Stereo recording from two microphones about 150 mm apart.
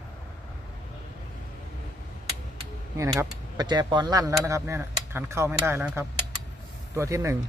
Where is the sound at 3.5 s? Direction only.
30° right (ahead or behind).